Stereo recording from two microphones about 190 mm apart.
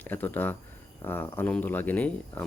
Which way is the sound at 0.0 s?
10° left (ahead or behind).